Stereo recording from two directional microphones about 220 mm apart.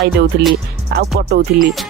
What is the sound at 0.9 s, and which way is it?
Speech, 50° right (ahead or behind).